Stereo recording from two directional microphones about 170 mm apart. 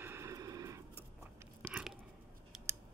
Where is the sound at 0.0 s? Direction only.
15° right (ahead or behind).